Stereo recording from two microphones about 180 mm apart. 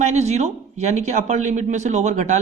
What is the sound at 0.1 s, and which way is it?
Speech, 40° right (ahead or behind).